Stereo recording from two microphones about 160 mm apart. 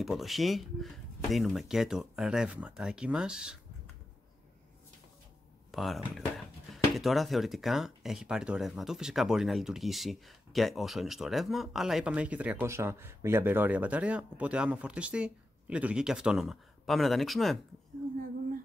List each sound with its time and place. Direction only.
0.0 s speech: centre (ahead or behind)
5.7 s speech: centre (ahead or behind)